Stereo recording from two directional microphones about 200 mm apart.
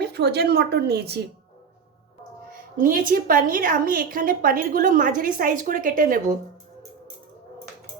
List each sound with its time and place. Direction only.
0.0 s a woman's voice: 55° right (ahead or behind)
2.5 s a sound: 45° right (ahead or behind)
3.1 s a woman's voice: 45° right (ahead or behind)